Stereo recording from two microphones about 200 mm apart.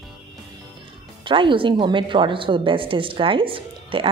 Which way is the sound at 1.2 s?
25° right (ahead or behind).